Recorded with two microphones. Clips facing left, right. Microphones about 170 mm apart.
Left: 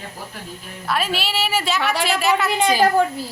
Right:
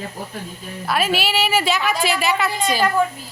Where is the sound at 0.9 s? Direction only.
5° right (ahead or behind).